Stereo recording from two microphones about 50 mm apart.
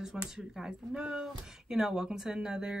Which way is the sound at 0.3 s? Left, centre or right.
Centre.